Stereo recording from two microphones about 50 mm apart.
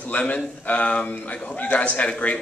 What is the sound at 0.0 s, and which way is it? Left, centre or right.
A man's voice, left.